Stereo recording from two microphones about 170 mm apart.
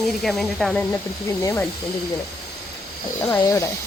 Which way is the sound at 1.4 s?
15° left (ahead or behind).